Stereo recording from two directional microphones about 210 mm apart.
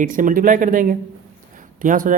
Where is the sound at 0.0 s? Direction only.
40° right (ahead or behind).